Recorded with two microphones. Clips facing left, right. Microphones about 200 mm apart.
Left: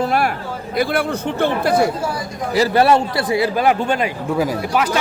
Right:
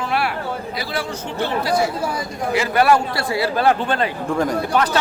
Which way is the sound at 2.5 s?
35° left (ahead or behind).